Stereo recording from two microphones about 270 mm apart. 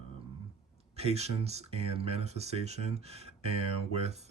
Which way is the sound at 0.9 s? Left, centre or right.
Right.